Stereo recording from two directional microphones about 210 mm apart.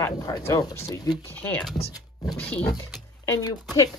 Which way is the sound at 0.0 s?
20° left (ahead or behind).